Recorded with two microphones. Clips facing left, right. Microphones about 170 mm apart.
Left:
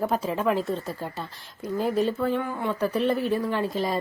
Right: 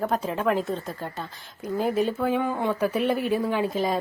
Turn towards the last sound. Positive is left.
turn(degrees=0)  # may be behind; listen again after turning